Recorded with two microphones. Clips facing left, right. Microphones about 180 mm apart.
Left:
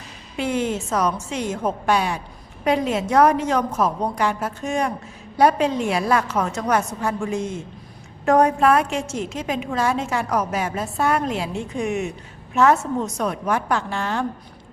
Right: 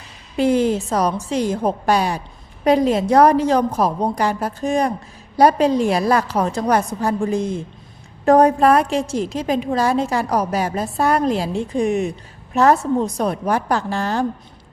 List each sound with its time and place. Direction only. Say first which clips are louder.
0.3 s a woman's voice: right 7 dB; 35° right (ahead or behind)